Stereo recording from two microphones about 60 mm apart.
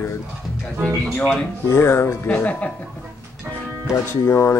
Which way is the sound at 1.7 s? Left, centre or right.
Left.